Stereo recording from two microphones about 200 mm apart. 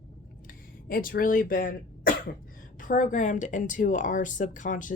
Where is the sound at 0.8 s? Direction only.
45° left (ahead or behind).